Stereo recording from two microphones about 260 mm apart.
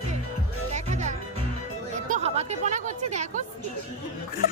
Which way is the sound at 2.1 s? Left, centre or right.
Right.